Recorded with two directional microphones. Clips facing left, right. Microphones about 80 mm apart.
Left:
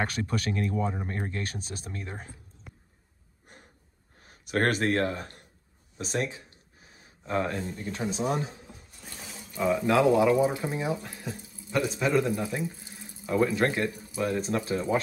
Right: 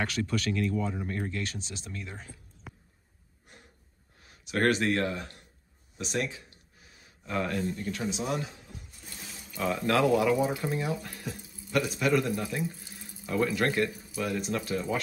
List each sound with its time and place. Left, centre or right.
0.0 s speech: left
4.2 s speech: left
8.1 s speech: left
9.6 s speech: centre